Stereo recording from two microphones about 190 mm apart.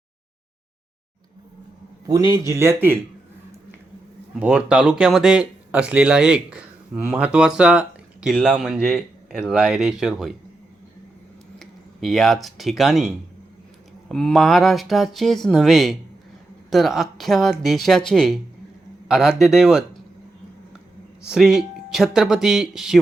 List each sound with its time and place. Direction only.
2.0 s speech: 15° right (ahead or behind)
4.4 s speech: 5° right (ahead or behind)
11.6 s speech: centre (ahead or behind)
14.1 s speech: centre (ahead or behind)
21.2 s speech: 5° right (ahead or behind)